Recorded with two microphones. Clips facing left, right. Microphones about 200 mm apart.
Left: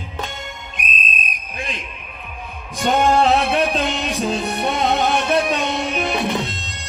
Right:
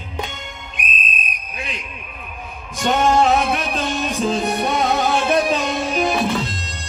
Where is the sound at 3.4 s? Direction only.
65° left (ahead or behind).